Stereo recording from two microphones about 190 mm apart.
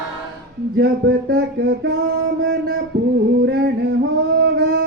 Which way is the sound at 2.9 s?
60° right (ahead or behind).